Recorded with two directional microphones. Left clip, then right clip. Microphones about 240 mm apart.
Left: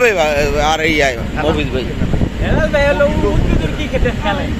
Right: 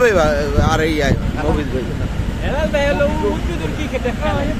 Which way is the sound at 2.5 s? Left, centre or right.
Left.